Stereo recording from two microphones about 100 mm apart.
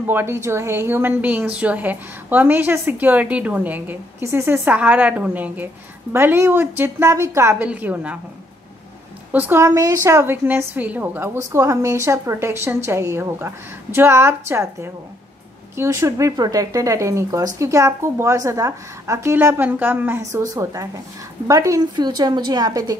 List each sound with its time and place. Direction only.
0.0 s a woman's voice: 25° right (ahead or behind)
7.5 s a woman's voice: 15° right (ahead or behind)
9.3 s a woman's voice: 20° right (ahead or behind); by 22.9 s 40° right (ahead or behind)